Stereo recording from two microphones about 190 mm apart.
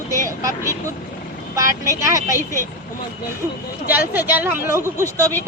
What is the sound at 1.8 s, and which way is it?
Speech, 15° right (ahead or behind).